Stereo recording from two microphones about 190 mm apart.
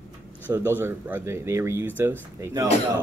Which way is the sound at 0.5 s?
10° right (ahead or behind).